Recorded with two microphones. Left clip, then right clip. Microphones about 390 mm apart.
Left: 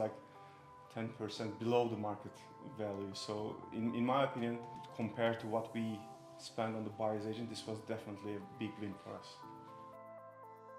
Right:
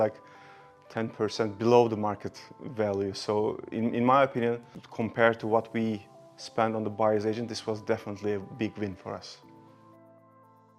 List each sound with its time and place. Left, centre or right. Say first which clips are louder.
0.9 s speech: right 14 dB; right